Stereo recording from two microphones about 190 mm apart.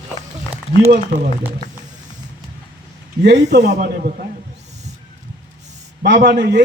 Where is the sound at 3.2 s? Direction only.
65° right (ahead or behind).